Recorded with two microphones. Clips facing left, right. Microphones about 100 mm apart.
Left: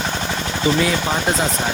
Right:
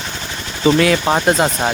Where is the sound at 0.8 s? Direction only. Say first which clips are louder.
Right 5 dB; 75° right (ahead or behind).